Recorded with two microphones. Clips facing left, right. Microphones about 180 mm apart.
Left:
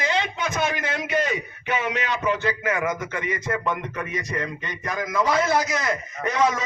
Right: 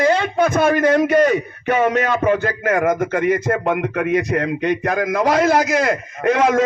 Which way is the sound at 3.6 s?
65° right (ahead or behind).